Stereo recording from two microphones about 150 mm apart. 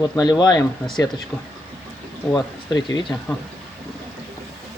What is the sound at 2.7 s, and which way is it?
Speech, 30° left (ahead or behind).